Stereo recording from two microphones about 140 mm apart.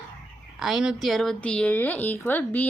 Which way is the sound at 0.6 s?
5° right (ahead or behind).